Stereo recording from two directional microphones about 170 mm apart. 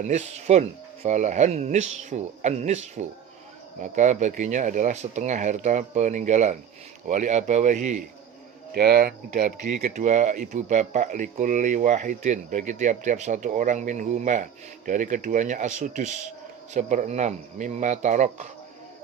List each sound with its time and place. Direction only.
0.0 s speech: 40° right (ahead or behind)
8.7 s speech: 70° right (ahead or behind); by 18.4 s 45° right (ahead or behind)